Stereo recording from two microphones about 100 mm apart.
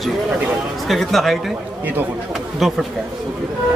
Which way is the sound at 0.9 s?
Centre (ahead or behind).